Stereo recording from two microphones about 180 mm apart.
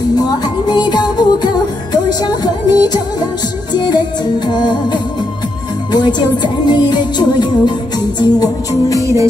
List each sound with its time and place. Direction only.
0.1 s music: 20° left (ahead or behind)
9.0 s music: 15° right (ahead or behind)